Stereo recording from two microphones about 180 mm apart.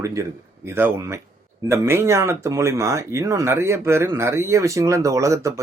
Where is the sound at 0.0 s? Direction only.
15° right (ahead or behind).